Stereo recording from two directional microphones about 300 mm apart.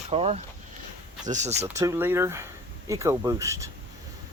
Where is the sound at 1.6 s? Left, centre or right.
Centre.